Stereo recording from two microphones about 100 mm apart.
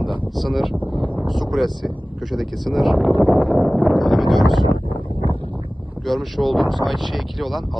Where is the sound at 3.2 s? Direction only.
15° right (ahead or behind).